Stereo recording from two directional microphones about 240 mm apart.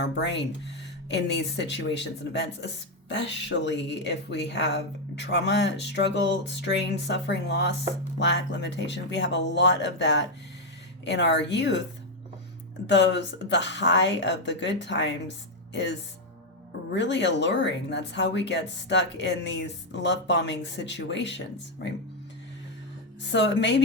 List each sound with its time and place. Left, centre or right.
0.0 s speech: left
12.9 s speech: left
23.2 s speech: left